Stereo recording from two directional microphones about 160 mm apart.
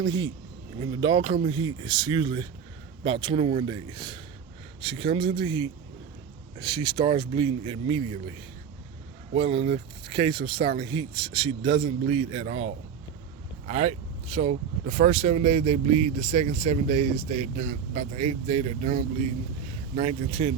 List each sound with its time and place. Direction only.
0.0 s a man's voice: 25° right (ahead or behind)
9.3 s a man's voice: 35° right (ahead or behind)